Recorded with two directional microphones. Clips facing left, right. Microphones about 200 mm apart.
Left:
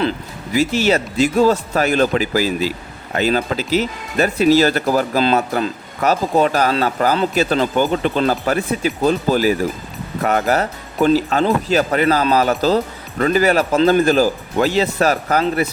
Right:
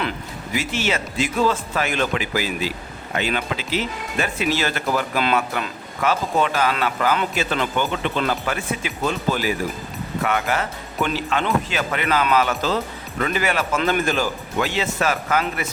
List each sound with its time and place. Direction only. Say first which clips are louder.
0.5 s speech: left 8 dB; 35° left (ahead or behind)